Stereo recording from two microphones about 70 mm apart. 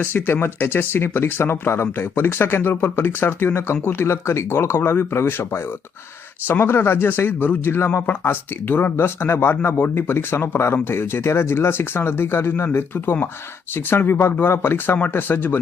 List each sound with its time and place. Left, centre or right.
0.0 s speech: left